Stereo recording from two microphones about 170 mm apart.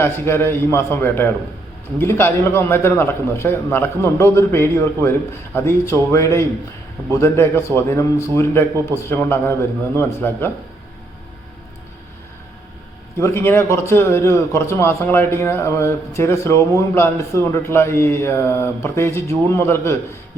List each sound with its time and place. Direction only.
0.0 s a man's voice: 15° left (ahead or behind)
13.1 s a man's voice: 15° left (ahead or behind)